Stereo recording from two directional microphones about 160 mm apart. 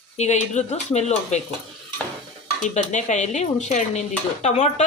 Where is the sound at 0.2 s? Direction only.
45° left (ahead or behind).